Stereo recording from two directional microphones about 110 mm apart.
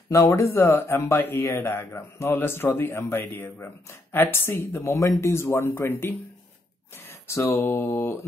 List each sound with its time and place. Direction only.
0.1 s speech: 25° left (ahead or behind)
7.2 s speech: 25° left (ahead or behind)